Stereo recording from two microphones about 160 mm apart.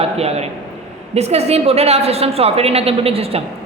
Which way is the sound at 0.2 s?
40° right (ahead or behind).